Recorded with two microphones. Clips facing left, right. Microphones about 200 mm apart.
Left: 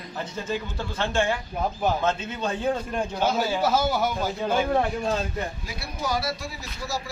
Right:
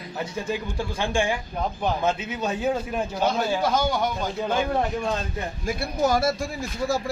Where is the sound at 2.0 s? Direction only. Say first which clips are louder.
Right 1 dB; 10° right (ahead or behind).